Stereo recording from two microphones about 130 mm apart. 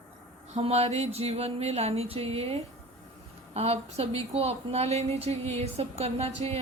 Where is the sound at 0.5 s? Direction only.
55° right (ahead or behind).